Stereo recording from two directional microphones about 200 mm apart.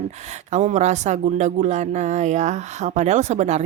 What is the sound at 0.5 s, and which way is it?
Speech, 35° right (ahead or behind).